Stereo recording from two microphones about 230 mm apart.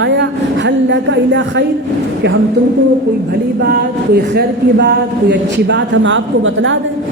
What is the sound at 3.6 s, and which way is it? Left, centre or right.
A woman's voice, right.